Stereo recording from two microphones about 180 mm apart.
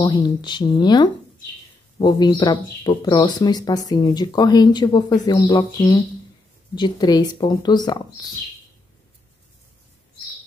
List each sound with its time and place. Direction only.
0.0 s speech: 25° left (ahead or behind)